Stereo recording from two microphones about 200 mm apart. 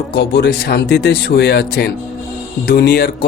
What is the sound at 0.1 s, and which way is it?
Speech, 55° left (ahead or behind).